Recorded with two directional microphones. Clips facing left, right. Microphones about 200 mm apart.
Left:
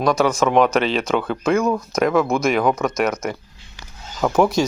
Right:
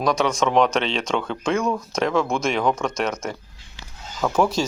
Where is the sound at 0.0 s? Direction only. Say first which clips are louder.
Left 3 dB; centre (ahead or behind).